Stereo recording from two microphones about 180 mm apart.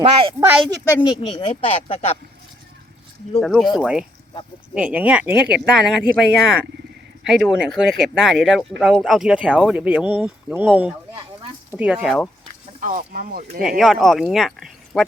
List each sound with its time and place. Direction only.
0.0 s speech: 30° right (ahead or behind)
1.2 s speech: 25° left (ahead or behind)
3.4 s speech: centre (ahead or behind)
12.8 s speech: 50° right (ahead or behind)
13.6 s speech: centre (ahead or behind)